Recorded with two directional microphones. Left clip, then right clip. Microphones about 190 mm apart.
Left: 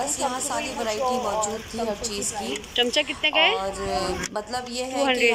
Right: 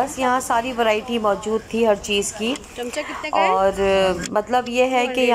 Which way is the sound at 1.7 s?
40° right (ahead or behind).